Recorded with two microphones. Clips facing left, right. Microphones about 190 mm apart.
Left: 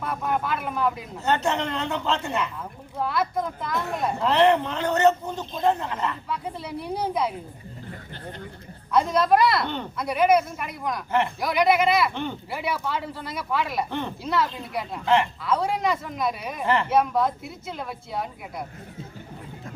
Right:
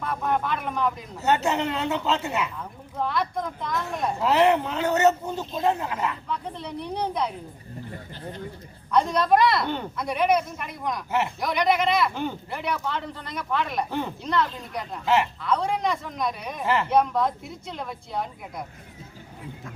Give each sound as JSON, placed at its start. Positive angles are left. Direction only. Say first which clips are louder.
{"t": 0.0, "sound": "speech", "louder": "right 1 dB", "side_deg": 5}
{"t": 1.2, "sound": "speech", "louder": "right 1 dB", "side_deg": -5}
{"t": 3.0, "sound": "speech", "louder": "left 1 dB", "side_deg": 5}
{"t": 6.2, "sound": "speech", "louder": "left 1 dB", "side_deg": 5}
{"t": 8.9, "sound": "speech", "louder": "left 1 dB", "side_deg": 5}
{"t": 15.0, "sound": "speech", "louder": "left 1 dB", "side_deg": -5}